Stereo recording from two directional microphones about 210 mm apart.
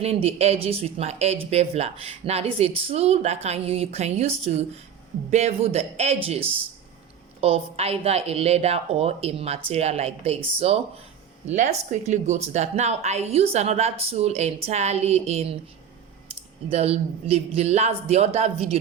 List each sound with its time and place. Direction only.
0.0 s speech: 30° right (ahead or behind)
7.4 s speech: 30° right (ahead or behind)
16.6 s speech: 30° right (ahead or behind)